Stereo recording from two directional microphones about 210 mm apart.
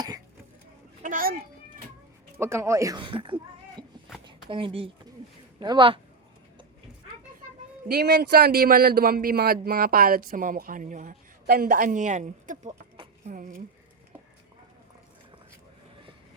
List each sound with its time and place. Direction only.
1.0 s a sound: 40° right (ahead or behind)
2.4 s speech: 10° right (ahead or behind)
7.9 s a man's voice: 50° right (ahead or behind)